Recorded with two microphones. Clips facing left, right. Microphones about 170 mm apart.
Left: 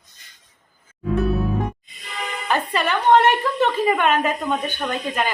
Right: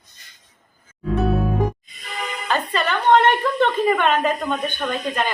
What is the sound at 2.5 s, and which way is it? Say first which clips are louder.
A woman's voice: left 1 dB; 10° left (ahead or behind).